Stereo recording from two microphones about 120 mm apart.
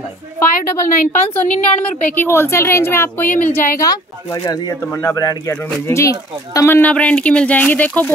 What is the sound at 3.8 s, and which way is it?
A woman's voice, 30° left (ahead or behind).